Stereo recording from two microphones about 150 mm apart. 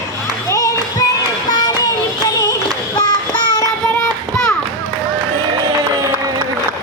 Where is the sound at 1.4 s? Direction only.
30° left (ahead or behind).